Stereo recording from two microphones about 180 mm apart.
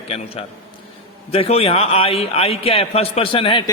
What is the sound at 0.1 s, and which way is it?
A man's voice, 30° left (ahead or behind).